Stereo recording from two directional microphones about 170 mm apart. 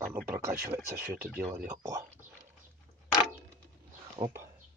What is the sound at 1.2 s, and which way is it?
Speech, 15° right (ahead or behind).